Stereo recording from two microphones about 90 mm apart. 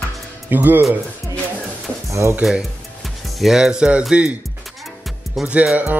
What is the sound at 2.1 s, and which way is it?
Speech, 30° right (ahead or behind).